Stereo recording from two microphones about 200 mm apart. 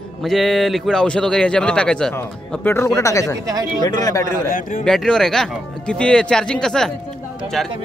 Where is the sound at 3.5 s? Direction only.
20° right (ahead or behind).